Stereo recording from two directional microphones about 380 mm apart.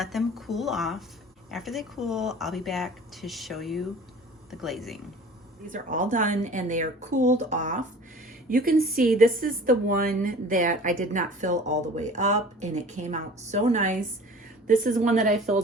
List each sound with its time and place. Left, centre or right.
0.0 s speech: centre
5.6 s a woman's voice: centre